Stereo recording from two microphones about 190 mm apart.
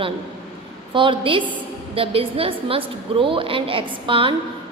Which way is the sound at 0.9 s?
25° right (ahead or behind).